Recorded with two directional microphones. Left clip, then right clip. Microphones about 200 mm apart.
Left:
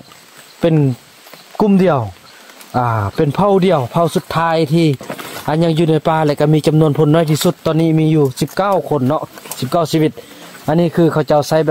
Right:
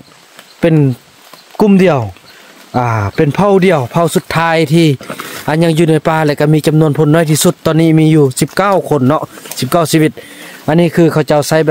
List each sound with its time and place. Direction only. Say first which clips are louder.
0.6 s speech: right 3 dB; 20° right (ahead or behind)